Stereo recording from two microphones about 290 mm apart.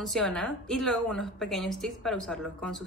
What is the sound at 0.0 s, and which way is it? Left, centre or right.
A woman's voice, centre.